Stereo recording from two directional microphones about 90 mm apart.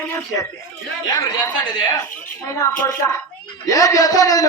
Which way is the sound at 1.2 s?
40° left (ahead or behind).